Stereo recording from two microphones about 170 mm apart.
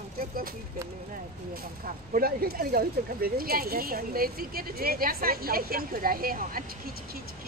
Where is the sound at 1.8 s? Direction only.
55° right (ahead or behind).